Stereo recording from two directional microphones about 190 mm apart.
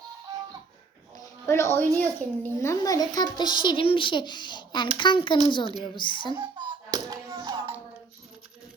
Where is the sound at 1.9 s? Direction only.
10° left (ahead or behind).